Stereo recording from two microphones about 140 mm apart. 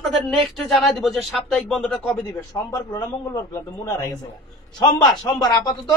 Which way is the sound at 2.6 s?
25° left (ahead or behind).